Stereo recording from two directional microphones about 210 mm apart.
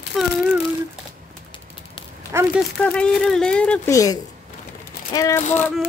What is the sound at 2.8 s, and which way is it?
Yodeling, 5° left (ahead or behind).